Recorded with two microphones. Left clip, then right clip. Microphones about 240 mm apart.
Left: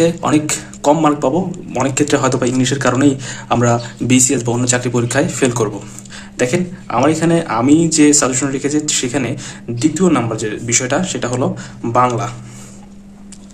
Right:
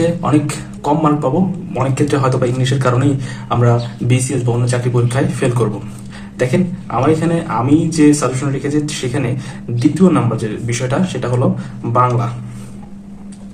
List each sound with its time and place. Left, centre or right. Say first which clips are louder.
0.0 s a man's voice: left 1 dB; left